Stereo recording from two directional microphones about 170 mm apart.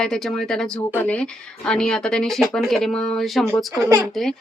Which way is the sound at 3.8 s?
15° right (ahead or behind).